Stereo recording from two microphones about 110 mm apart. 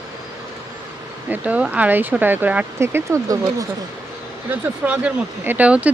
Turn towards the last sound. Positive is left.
turn(degrees=-10)  # may be behind; listen again after turning